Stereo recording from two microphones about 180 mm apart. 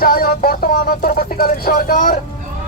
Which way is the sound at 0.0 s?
55° left (ahead or behind).